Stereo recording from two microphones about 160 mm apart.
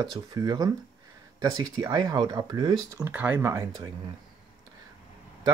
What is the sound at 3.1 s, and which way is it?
Speech, 10° right (ahead or behind).